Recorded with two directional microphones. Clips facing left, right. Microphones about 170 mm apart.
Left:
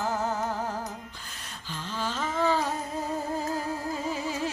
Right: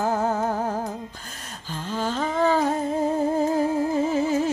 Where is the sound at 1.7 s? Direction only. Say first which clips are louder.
Right 6 dB; 45° right (ahead or behind).